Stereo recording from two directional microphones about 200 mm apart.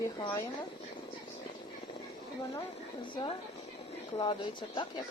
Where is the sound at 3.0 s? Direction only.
25° left (ahead or behind).